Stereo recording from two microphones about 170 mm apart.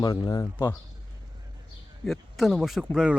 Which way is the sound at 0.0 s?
25° left (ahead or behind).